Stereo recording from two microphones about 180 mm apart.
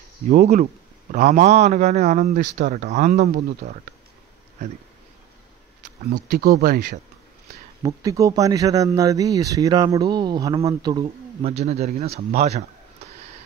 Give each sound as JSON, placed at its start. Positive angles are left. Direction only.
{"t": 1.1, "sound": "speech", "side_deg": -40}
{"t": 6.3, "sound": "speech", "side_deg": -55}
{"t": 7.8, "sound": "speech", "side_deg": -20}
{"t": 11.4, "sound": "speech", "side_deg": -35}